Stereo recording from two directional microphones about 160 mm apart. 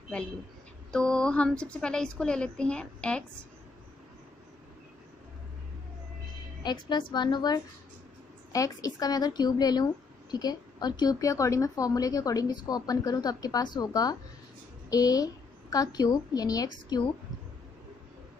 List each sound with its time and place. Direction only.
0.9 s a woman's voice: 5° left (ahead or behind)
6.6 s a woman's voice: 30° left (ahead or behind)